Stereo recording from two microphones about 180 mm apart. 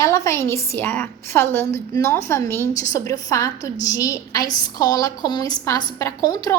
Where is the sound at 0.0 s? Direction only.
15° left (ahead or behind).